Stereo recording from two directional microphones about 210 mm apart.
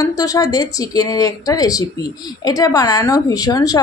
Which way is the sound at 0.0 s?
15° left (ahead or behind).